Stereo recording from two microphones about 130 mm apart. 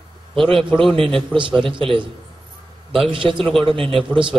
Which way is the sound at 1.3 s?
40° right (ahead or behind).